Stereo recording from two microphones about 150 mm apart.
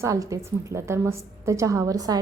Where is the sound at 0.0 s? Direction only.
20° right (ahead or behind).